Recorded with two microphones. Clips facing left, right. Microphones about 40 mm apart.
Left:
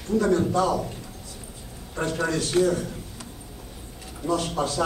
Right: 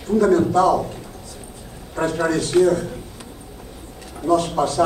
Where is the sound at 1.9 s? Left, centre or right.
Right.